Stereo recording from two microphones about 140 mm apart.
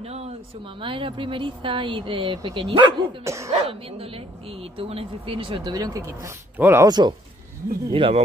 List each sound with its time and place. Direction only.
0.7 s speech: 40° right (ahead or behind)
3.3 s speech: 20° right (ahead or behind)
3.5 s speech: 45° right (ahead or behind); by 6.9 s 20° right (ahead or behind)
6.9 s speech: 30° right (ahead or behind)